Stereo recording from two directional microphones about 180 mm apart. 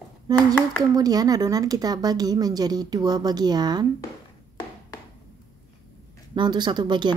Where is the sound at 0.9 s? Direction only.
20° right (ahead or behind).